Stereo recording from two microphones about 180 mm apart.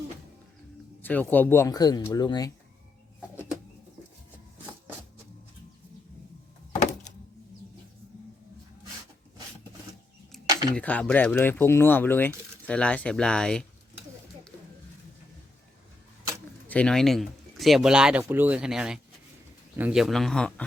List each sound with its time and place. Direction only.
1.0 s speech: 10° left (ahead or behind)
10.8 s speech: 5° left (ahead or behind)
16.6 s speech: 5° left (ahead or behind)